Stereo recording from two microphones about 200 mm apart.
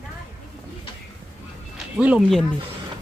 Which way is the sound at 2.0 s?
5° right (ahead or behind).